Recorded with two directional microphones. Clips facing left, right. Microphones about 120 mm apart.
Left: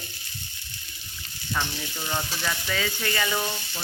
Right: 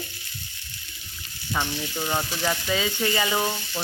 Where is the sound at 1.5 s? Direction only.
25° right (ahead or behind).